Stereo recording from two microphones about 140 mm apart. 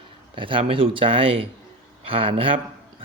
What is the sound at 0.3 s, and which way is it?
Speech, 40° right (ahead or behind).